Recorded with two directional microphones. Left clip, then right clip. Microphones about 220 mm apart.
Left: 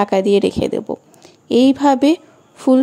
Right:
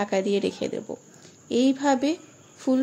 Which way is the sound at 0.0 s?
30° left (ahead or behind).